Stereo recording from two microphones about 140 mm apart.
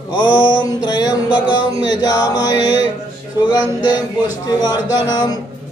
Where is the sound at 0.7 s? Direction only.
30° left (ahead or behind).